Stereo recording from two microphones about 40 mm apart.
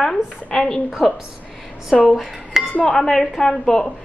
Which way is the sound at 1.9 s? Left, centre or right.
Centre.